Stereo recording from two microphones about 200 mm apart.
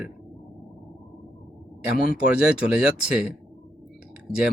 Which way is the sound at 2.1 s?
5° right (ahead or behind).